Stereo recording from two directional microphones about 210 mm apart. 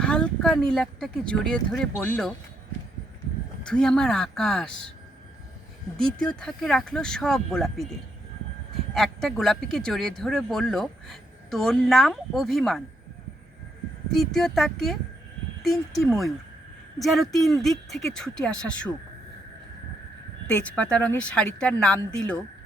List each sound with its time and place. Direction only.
0.0 s speech: 5° left (ahead or behind)
3.6 s speech: 5° left (ahead or behind)
6.0 s speech: 5° left (ahead or behind)
9.0 s speech: centre (ahead or behind)
14.1 s speech: centre (ahead or behind)
20.5 s speech: 5° left (ahead or behind)